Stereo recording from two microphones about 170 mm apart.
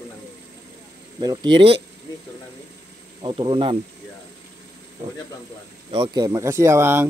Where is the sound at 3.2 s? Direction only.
25° right (ahead or behind).